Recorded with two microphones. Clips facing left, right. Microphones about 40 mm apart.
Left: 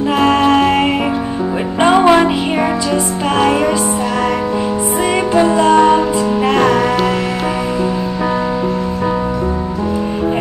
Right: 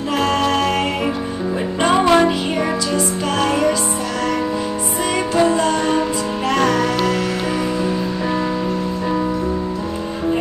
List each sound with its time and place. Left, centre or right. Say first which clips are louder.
0.2 s music: left 6 dB; left
5.3 s music: left 6 dB; centre